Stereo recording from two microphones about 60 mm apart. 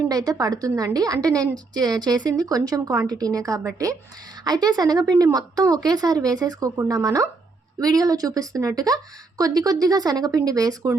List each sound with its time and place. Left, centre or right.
0.1 s a woman's voice: right
4.4 s speech: right
6.9 s a woman's voice: right